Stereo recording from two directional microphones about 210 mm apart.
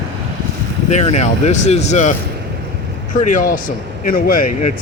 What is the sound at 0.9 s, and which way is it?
Speech, 30° left (ahead or behind).